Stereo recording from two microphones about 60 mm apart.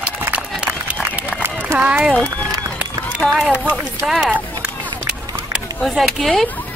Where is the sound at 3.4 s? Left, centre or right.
Centre.